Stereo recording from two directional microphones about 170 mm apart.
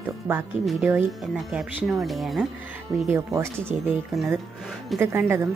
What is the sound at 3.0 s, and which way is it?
Speech, 15° right (ahead or behind).